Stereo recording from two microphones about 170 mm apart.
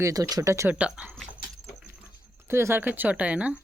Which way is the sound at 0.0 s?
20° right (ahead or behind).